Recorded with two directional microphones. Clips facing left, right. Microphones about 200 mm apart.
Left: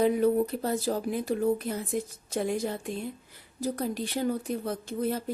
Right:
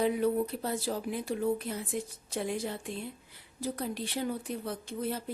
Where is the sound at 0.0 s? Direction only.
45° left (ahead or behind).